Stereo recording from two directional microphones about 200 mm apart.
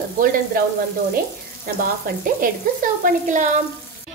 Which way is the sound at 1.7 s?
45° right (ahead or behind).